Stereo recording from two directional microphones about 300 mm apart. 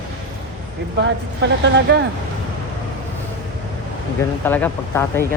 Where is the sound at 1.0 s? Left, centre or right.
Right.